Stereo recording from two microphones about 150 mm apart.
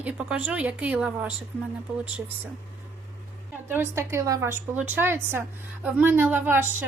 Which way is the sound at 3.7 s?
15° right (ahead or behind).